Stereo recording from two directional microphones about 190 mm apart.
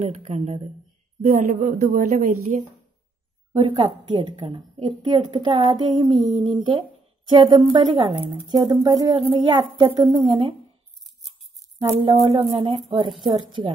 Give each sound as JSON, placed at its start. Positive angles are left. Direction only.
{"t": 0.0, "sound": "a woman's voice", "side_deg": -35}
{"t": 3.6, "sound": "a woman's voice", "side_deg": -25}
{"t": 11.9, "sound": "a woman's voice", "side_deg": -30}